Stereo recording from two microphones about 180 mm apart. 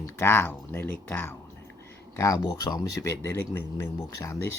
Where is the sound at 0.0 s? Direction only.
15° left (ahead or behind).